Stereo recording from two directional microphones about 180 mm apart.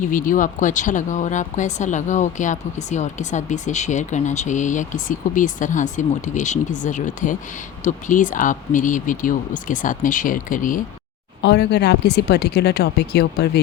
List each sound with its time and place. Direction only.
0.0 s speech: 50° left (ahead or behind)
11.4 s speech: 70° left (ahead or behind)